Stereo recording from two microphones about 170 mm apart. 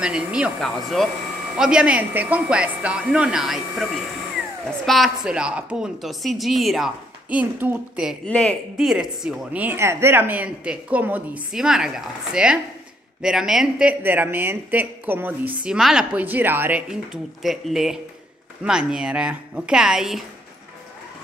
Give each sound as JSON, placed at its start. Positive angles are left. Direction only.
{"t": 0.0, "sound": "a woman's voice", "side_deg": -5}
{"t": 4.8, "sound": "a woman's voice", "side_deg": 0}
{"t": 8.3, "sound": "a woman's voice", "side_deg": 5}